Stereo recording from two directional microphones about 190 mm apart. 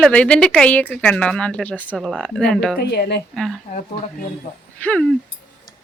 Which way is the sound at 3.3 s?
Centre (ahead or behind).